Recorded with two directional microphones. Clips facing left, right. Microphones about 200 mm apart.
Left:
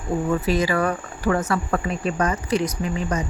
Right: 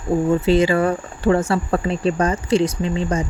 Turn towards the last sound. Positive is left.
turn(degrees=-30)  # may be behind; listen again after turning